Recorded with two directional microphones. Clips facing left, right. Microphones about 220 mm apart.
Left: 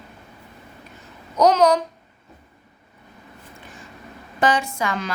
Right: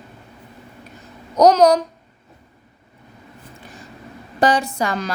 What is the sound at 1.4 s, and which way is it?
Speech, 40° right (ahead or behind).